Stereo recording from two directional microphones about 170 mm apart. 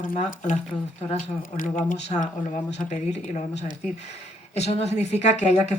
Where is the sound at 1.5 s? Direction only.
50° left (ahead or behind).